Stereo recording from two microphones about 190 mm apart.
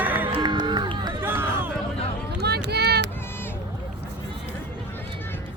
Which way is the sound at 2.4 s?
60° right (ahead or behind).